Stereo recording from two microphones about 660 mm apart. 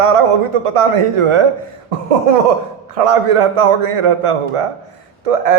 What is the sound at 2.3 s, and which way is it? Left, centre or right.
A man's voice, right.